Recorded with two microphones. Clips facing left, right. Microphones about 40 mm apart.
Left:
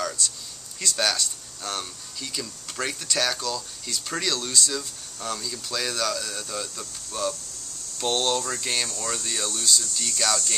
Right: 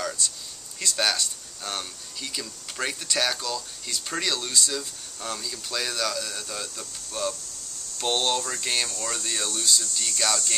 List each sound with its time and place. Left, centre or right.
0.2 s speech: centre